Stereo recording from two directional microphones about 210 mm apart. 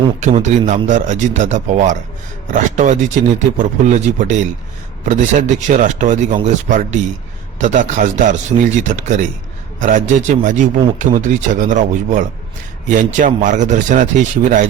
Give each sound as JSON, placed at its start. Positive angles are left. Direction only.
{"t": 0.2, "sound": "speech", "side_deg": -35}